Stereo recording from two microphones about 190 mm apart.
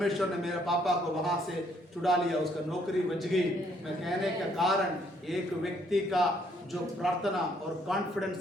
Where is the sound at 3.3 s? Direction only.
Centre (ahead or behind).